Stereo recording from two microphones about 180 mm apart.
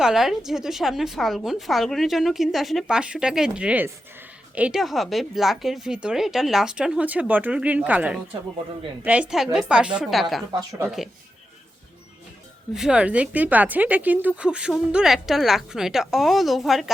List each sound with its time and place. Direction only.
0.0 s a woman's voice: centre (ahead or behind)
10.5 s speech: 20° right (ahead or behind)
10.8 s a woman's voice: centre (ahead or behind)
12.7 s a woman's voice: 5° right (ahead or behind)